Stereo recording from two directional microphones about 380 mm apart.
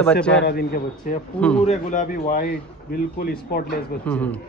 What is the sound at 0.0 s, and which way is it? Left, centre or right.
Speech, centre.